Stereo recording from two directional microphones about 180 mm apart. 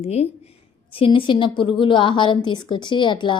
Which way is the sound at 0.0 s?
35° left (ahead or behind).